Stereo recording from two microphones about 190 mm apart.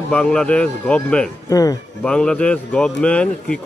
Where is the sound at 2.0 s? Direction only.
5° left (ahead or behind).